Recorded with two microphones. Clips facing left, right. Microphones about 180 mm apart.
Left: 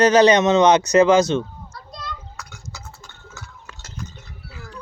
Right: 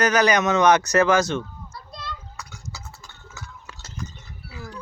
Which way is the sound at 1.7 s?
5° right (ahead or behind).